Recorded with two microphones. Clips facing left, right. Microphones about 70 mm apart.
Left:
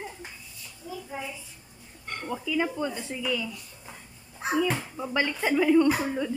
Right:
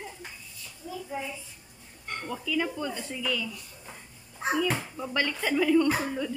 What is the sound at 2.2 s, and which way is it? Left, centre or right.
A child's voice, left.